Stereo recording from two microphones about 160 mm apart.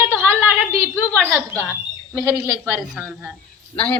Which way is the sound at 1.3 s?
10° right (ahead or behind).